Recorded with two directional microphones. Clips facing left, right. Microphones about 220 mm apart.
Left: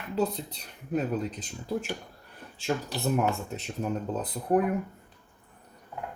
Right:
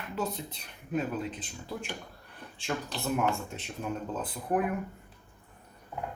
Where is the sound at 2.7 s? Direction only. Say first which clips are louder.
Left 4 dB; 25° left (ahead or behind).